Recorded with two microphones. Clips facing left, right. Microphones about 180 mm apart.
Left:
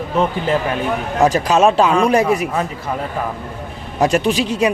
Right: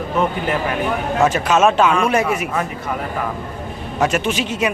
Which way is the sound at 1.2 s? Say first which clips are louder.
Left 2 dB; 35° left (ahead or behind).